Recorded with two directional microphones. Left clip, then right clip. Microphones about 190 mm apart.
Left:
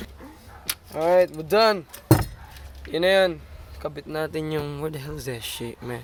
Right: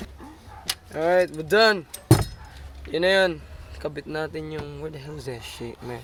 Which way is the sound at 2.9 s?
5° left (ahead or behind).